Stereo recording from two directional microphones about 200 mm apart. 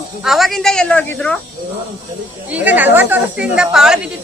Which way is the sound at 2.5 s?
10° right (ahead or behind).